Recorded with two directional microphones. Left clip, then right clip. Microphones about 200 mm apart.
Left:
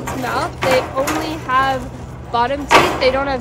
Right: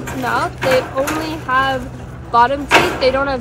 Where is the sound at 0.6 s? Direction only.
5° left (ahead or behind).